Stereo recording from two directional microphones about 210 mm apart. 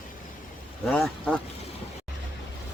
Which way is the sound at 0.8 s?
5° left (ahead or behind).